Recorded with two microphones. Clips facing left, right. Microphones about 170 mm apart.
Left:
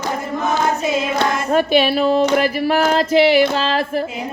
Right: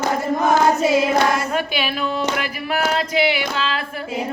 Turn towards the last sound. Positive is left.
turn(degrees=40)  # may be behind; listen again after turning